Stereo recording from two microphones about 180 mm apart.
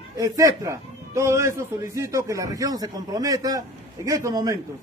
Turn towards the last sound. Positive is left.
turn(degrees=-20)  # may be behind; listen again after turning